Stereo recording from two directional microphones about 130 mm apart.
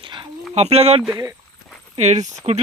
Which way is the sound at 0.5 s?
55° right (ahead or behind).